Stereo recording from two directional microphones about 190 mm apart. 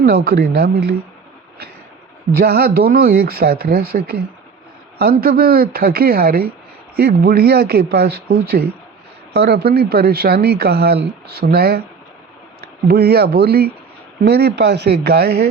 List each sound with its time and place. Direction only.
0.3 s speech: 55° right (ahead or behind)
2.4 s speech: 55° right (ahead or behind)
12.9 s speech: 55° right (ahead or behind)